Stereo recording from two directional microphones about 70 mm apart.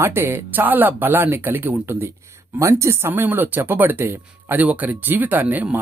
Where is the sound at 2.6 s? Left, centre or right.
Right.